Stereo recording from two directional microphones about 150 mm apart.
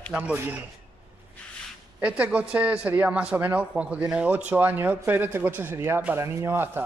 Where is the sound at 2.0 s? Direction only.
10° right (ahead or behind).